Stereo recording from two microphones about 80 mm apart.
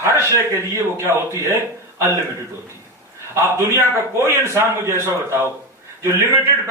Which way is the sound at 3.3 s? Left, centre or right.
Right.